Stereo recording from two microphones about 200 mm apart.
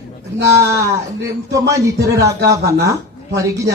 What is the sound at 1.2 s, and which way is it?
Speech, 15° right (ahead or behind).